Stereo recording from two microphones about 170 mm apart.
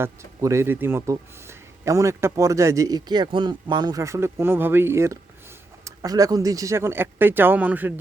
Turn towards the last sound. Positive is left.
turn(degrees=-10)  # may be behind; listen again after turning